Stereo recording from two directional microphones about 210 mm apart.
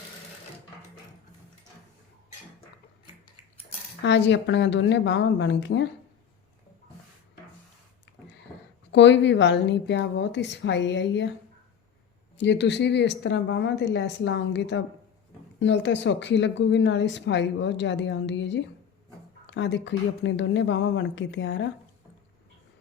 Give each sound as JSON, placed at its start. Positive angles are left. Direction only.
{"t": 4.0, "sound": "a woman's voice", "side_deg": 55}
{"t": 8.9, "sound": "a woman's voice", "side_deg": 55}
{"t": 12.4, "sound": "a woman's voice", "side_deg": 55}